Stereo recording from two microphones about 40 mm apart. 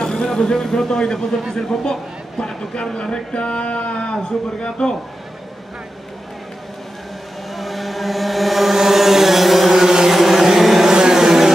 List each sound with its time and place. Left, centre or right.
0.0 s a man's voice: centre
7.5 s vehicle: centre
10.1 s a sound: centre
10.9 s vehicle: centre